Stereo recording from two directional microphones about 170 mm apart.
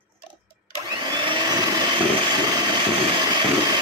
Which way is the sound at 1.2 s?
25° right (ahead or behind).